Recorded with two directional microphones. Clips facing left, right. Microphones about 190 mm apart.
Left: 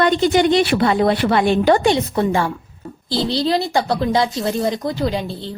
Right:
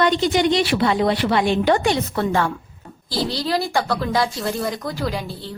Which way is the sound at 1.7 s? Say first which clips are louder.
Left 4 dB; 25° left (ahead or behind).